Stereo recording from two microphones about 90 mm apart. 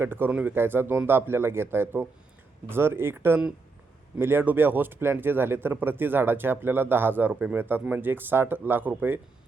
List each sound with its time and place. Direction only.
0.0 s speech: 25° right (ahead or behind)
0.3 s speech: 15° right (ahead or behind)
0.5 s speech: 25° right (ahead or behind)